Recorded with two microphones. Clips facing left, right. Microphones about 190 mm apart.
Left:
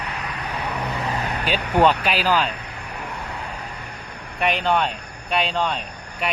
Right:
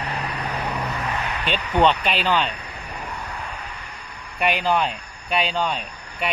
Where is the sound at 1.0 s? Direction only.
30° left (ahead or behind).